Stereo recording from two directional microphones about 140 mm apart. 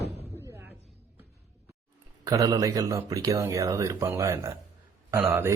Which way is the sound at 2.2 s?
25° right (ahead or behind).